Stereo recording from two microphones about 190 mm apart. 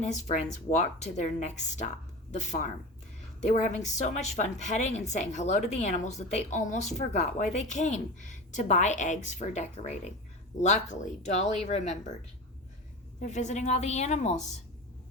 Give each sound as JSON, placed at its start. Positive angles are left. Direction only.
{"t": 0.8, "sound": "a woman's voice", "side_deg": 35}
{"t": 13.2, "sound": "a woman's voice", "side_deg": 40}